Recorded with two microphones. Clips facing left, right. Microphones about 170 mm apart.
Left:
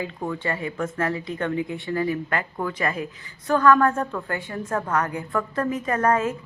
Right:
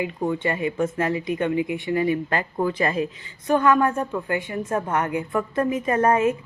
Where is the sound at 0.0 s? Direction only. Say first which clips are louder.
Right 4 dB; 20° right (ahead or behind).